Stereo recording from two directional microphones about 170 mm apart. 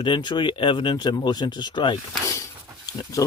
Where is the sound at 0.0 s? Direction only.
25° left (ahead or behind).